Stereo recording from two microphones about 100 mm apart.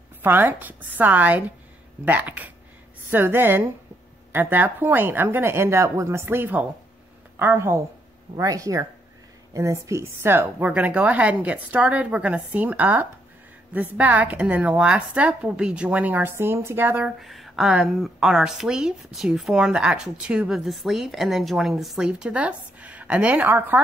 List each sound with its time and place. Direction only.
0.2 s a woman's voice: 20° right (ahead or behind)
17.0 s a woman's voice: centre (ahead or behind); by 23.8 s 20° right (ahead or behind)